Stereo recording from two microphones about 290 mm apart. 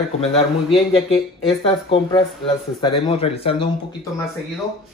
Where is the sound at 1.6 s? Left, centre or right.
Centre.